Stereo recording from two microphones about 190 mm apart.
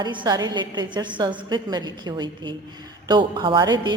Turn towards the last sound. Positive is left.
turn(degrees=-20)  # may be behind; listen again after turning